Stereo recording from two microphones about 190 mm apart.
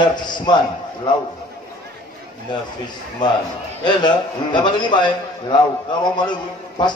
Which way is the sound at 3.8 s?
25° left (ahead or behind).